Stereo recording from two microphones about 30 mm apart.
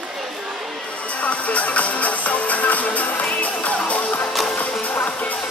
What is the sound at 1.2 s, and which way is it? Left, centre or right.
Music, left.